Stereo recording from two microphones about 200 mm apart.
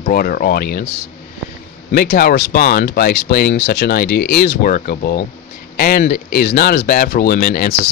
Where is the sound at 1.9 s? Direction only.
50° left (ahead or behind).